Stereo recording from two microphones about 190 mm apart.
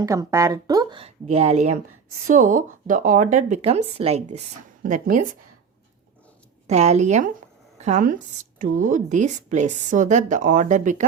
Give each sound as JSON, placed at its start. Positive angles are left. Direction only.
{"t": 0.0, "sound": "speech", "side_deg": -20}
{"t": 6.7, "sound": "speech", "side_deg": -35}